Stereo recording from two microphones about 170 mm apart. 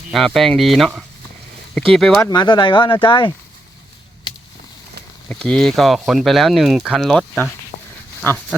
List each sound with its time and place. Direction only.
0.1 s speech: centre (ahead or behind)
2.3 s speech: 25° left (ahead or behind)
5.3 s speech: 5° left (ahead or behind)